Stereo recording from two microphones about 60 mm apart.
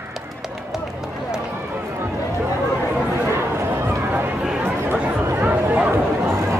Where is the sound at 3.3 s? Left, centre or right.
Right.